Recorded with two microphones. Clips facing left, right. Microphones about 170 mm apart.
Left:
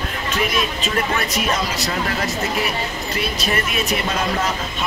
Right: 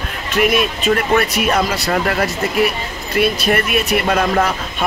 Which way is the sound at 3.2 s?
60° right (ahead or behind).